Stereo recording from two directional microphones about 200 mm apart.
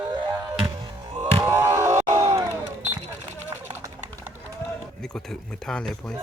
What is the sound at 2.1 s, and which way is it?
Crowd, 15° right (ahead or behind).